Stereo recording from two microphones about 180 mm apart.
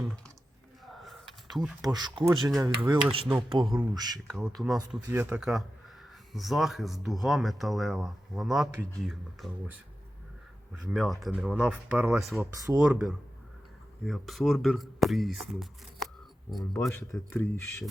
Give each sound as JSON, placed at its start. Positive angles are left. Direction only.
{"t": 1.0, "sound": "a sound", "side_deg": 0}
{"t": 1.8, "sound": "speech", "side_deg": -20}
{"t": 4.3, "sound": "speech", "side_deg": 0}
{"t": 10.9, "sound": "speech", "side_deg": 0}
{"t": 16.7, "sound": "speech", "side_deg": 15}